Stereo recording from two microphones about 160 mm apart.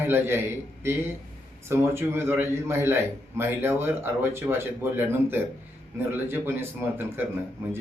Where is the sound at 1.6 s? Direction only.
15° right (ahead or behind).